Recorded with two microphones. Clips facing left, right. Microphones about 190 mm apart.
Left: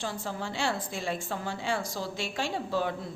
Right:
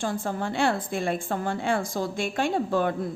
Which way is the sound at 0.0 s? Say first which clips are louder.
Right 6 dB; 50° right (ahead or behind).